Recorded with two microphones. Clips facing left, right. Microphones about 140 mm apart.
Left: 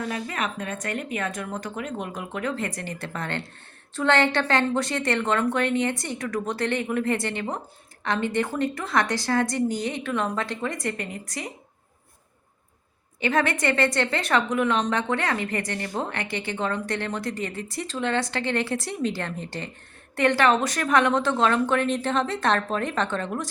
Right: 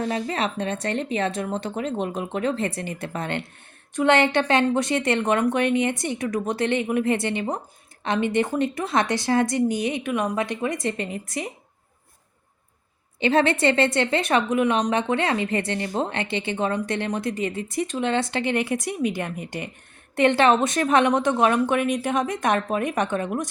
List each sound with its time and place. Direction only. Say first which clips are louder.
0.1 s a woman's voice: right 4 dB; 30° right (ahead or behind)
13.1 s a woman's voice: right 4 dB; 25° right (ahead or behind)